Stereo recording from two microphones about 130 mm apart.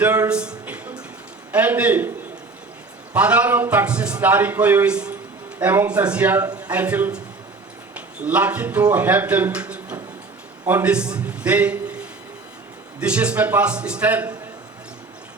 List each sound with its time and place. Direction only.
0.0 s a man's voice: 10° right (ahead or behind)